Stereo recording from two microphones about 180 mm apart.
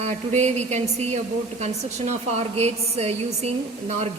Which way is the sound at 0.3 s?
40° right (ahead or behind).